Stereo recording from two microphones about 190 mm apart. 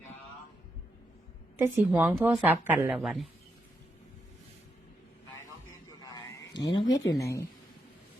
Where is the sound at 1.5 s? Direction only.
10° right (ahead or behind).